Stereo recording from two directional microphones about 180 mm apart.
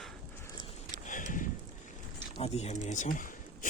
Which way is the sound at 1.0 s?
45° left (ahead or behind).